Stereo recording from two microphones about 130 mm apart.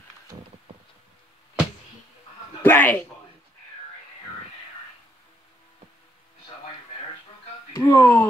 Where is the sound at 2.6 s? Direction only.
15° left (ahead or behind).